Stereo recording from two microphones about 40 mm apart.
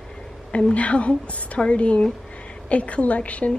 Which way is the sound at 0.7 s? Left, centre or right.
Left.